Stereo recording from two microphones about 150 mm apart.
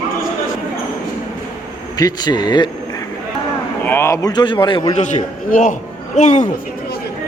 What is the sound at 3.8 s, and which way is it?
A man's voice, 15° left (ahead or behind).